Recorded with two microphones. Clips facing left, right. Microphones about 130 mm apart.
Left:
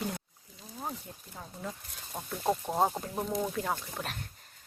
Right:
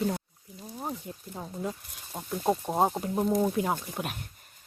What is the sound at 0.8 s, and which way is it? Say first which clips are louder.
Speech: right 3 dB; 20° right (ahead or behind).